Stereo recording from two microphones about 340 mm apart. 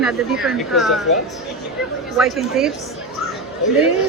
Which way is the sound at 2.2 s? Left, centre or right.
Centre.